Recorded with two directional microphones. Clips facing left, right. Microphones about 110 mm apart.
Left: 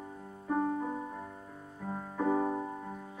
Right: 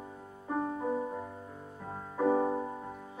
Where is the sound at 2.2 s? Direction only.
20° right (ahead or behind).